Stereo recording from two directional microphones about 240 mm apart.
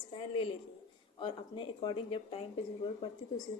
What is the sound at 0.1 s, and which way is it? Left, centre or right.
A woman's voice, left.